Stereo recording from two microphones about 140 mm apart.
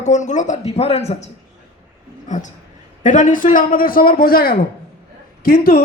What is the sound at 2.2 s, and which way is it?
A man's voice, 60° left (ahead or behind).